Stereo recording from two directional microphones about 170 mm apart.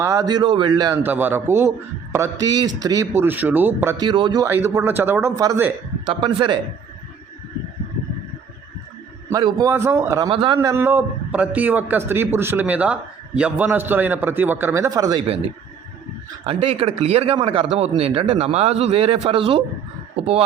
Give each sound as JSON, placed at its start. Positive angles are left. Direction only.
{"t": 0.0, "sound": "speech", "side_deg": -20}
{"t": 1.0, "sound": "a man's voice", "side_deg": -10}
{"t": 4.0, "sound": "speech", "side_deg": -25}
{"t": 4.4, "sound": "a man's voice", "side_deg": -15}
{"t": 6.1, "sound": "speech", "side_deg": -30}
{"t": 9.3, "sound": "a man's voice", "side_deg": -25}
{"t": 10.2, "sound": "speech", "side_deg": -30}
{"t": 10.6, "sound": "a man's voice", "side_deg": -15}
{"t": 16.4, "sound": "speech", "side_deg": -30}